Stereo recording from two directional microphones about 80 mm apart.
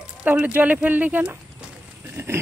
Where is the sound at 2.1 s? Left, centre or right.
Right.